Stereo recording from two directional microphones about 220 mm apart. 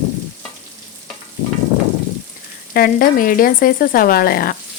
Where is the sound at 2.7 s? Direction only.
40° left (ahead or behind).